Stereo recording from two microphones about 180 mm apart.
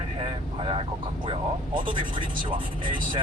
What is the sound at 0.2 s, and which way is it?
Vehicle, 30° right (ahead or behind).